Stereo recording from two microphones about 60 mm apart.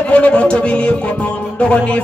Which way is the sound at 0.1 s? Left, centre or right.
Centre.